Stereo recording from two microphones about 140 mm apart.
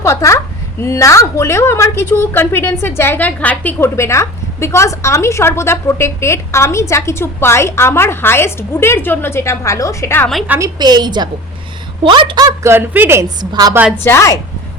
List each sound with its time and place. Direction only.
0.0 s a woman's voice: 20° left (ahead or behind)
10.6 s a woman's voice: 30° right (ahead or behind)
12.6 s a woman's voice: 15° right (ahead or behind)
13.4 s a woman's voice: 30° right (ahead or behind)
13.9 s a woman's voice: 15° left (ahead or behind)